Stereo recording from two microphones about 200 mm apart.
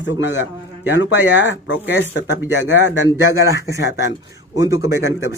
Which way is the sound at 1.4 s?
65° left (ahead or behind).